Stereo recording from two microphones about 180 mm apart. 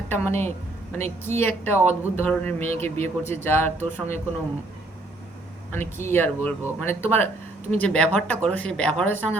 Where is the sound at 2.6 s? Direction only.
35° right (ahead or behind).